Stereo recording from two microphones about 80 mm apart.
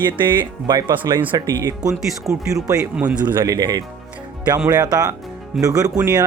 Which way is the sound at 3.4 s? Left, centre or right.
Right.